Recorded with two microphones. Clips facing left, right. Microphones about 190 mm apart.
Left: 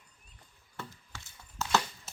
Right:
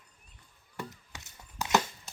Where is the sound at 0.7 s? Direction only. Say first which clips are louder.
Right 4 dB; 15° right (ahead or behind).